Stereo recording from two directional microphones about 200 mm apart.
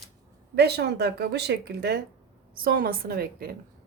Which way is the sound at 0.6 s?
55° right (ahead or behind).